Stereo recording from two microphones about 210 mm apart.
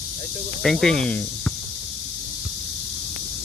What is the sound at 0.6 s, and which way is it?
Speech, centre (ahead or behind).